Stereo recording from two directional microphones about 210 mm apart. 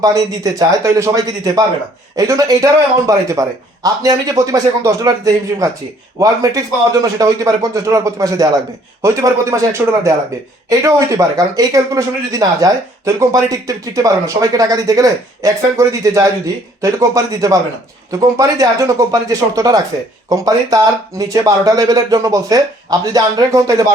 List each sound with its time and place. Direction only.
0.0 s speech: 15° right (ahead or behind)